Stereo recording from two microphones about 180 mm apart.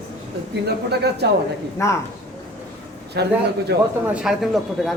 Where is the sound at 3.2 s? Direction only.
65° right (ahead or behind).